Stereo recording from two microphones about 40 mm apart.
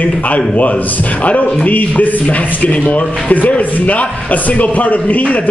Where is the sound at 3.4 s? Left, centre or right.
Left.